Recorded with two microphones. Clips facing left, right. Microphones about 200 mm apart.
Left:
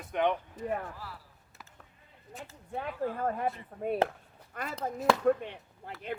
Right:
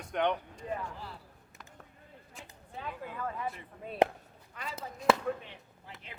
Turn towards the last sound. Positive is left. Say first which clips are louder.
# left 9 dB
turn(degrees=60)  # may be behind; listen again after turning